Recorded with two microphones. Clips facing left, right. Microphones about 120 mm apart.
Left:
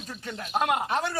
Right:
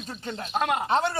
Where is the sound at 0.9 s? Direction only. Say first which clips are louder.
Right 4 dB; 25° right (ahead or behind).